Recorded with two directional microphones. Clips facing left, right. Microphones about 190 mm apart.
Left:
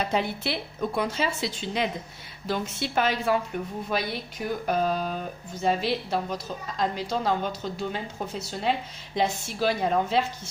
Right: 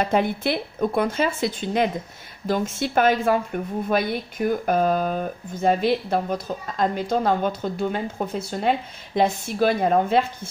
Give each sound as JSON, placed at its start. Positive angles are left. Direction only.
{"t": 0.0, "sound": "a woman's voice", "side_deg": -50}